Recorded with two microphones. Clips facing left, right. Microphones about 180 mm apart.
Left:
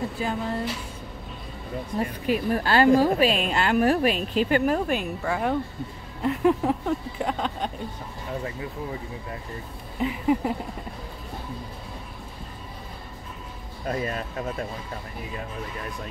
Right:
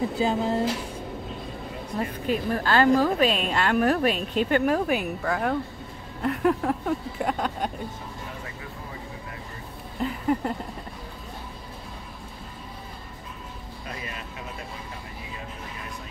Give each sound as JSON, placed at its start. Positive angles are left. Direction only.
{"t": 0.2, "sound": "speech", "side_deg": -30}
{"t": 2.2, "sound": "a woman's voice", "side_deg": 10}
{"t": 9.9, "sound": "a sound", "side_deg": 5}
{"t": 13.8, "sound": "speech", "side_deg": 45}